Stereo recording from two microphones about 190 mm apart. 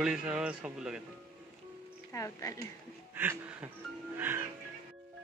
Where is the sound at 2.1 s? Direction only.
15° left (ahead or behind).